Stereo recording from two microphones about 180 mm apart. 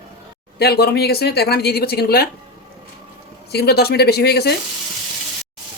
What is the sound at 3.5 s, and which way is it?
Speech, 60° left (ahead or behind).